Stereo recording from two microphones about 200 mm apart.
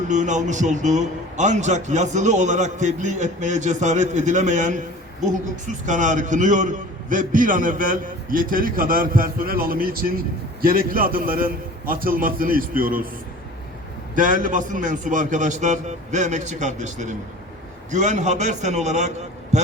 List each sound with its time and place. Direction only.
0.1 s a man's voice: 35° right (ahead or behind)
14.2 s a man's voice: 40° right (ahead or behind)
19.5 s a sound: 35° right (ahead or behind)